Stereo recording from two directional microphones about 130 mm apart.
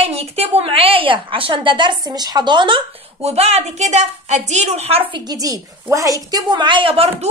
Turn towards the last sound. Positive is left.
turn(degrees=-50)  # may be behind; listen again after turning